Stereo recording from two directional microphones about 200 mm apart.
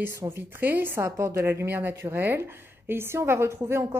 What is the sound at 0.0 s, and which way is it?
A woman's voice, 10° right (ahead or behind).